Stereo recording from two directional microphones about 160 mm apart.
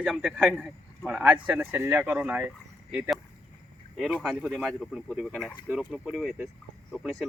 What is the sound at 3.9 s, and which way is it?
A man's voice, centre (ahead or behind).